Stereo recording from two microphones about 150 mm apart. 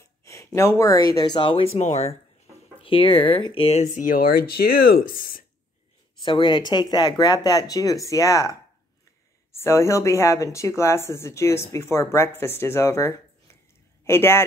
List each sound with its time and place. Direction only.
0.2 s a sound: 20° left (ahead or behind)
0.6 s speech: 20° left (ahead or behind); by 5.4 s 70° left (ahead or behind)
6.2 s a man's voice: 35° left (ahead or behind); by 14.4 s 15° left (ahead or behind)